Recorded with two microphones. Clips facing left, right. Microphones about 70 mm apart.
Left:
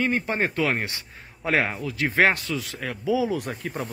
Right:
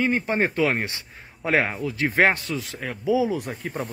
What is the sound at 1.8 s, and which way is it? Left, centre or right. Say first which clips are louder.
Speech: right 1 dB; right.